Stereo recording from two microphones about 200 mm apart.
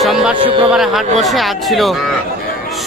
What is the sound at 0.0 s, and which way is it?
Music, centre (ahead or behind).